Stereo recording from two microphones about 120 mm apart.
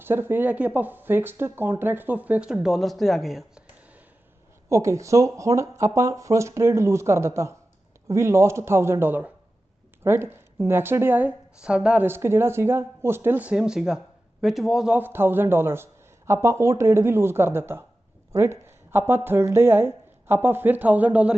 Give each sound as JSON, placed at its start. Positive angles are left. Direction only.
{"t": 0.0, "sound": "speech", "side_deg": -20}
{"t": 4.7, "sound": "speech", "side_deg": -25}
{"t": 14.9, "sound": "speech", "side_deg": -20}